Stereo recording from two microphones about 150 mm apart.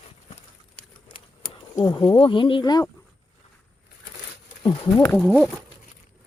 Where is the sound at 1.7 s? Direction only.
25° left (ahead or behind).